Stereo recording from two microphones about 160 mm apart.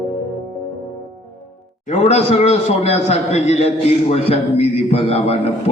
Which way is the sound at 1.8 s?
40° left (ahead or behind).